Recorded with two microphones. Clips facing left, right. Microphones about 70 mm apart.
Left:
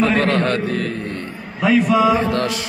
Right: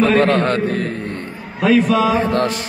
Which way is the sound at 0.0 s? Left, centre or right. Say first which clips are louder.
Right 3 dB; right.